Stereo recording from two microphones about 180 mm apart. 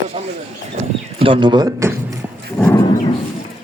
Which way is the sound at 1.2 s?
25° right (ahead or behind).